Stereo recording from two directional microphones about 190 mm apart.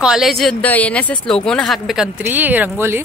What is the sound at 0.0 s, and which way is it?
A woman's voice, centre (ahead or behind).